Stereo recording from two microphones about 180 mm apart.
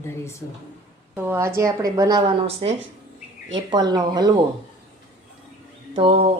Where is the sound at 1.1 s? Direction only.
10° right (ahead or behind).